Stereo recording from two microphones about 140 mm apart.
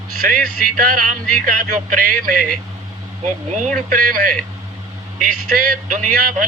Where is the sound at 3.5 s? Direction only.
65° right (ahead or behind).